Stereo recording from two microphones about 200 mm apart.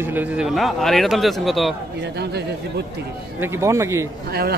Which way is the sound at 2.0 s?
55° right (ahead or behind).